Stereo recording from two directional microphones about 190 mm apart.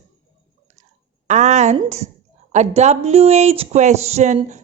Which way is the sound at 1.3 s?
40° right (ahead or behind).